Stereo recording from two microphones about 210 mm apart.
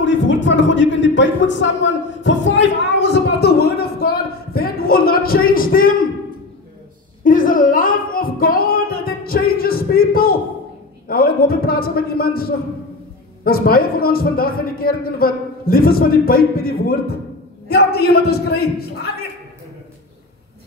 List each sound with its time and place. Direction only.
0.0 s a sound: 60° left (ahead or behind); by 5.9 s 40° left (ahead or behind)
7.2 s music: 40° left (ahead or behind)
11.1 s a man's voice: 45° left (ahead or behind)